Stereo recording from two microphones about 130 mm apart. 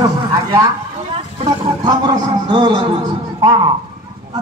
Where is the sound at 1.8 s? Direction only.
35° right (ahead or behind).